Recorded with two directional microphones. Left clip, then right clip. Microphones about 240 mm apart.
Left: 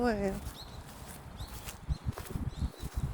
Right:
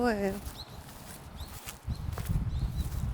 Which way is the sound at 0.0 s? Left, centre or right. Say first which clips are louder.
Right 2 dB; centre.